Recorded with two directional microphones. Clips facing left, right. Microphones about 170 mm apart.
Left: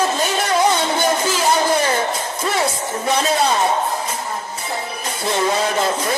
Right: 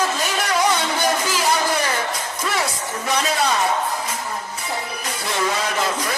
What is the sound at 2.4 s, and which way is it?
Speech, 25° left (ahead or behind).